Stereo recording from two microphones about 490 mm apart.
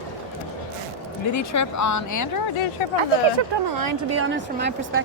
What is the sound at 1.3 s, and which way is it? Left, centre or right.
Speech, left.